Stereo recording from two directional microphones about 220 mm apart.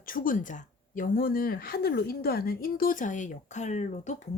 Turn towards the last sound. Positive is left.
turn(degrees=35)  # may be behind; listen again after turning